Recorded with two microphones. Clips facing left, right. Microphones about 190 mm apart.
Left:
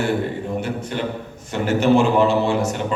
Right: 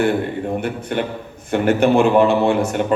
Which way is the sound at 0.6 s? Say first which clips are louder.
Right 2 dB; 55° right (ahead or behind).